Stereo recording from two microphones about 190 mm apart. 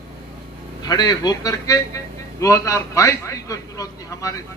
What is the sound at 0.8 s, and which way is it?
A man's voice, 20° left (ahead or behind).